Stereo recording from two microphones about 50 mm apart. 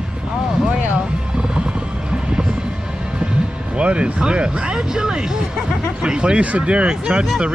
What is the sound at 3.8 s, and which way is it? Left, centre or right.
Music, right.